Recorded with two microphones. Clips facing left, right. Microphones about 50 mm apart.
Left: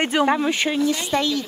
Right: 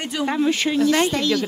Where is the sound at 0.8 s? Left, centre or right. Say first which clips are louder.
Right 4 dB; right.